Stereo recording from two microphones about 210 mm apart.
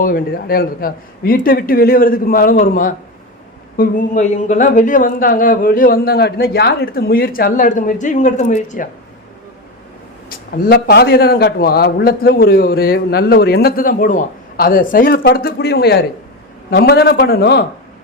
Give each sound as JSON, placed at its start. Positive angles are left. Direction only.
{"t": 0.0, "sound": "a man's voice", "side_deg": 45}
{"t": 10.2, "sound": "a man's voice", "side_deg": 50}